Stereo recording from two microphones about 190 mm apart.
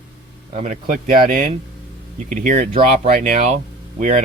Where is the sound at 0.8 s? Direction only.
45° right (ahead or behind).